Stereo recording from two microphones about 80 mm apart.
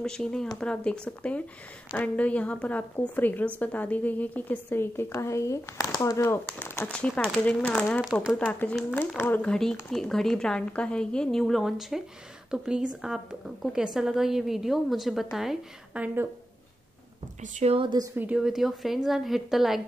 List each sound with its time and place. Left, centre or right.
0.0 s a woman's voice: centre; by 5.9 s left
5.9 s speech: left
6.2 s speech: left
6.9 s a woman's voice: centre
9.5 s a woman's voice: centre
16.0 s a woman's voice: centre
18.1 s a woman's voice: right
18.4 s a woman's voice: centre